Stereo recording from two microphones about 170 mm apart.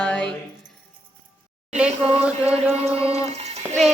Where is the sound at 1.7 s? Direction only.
5° right (ahead or behind).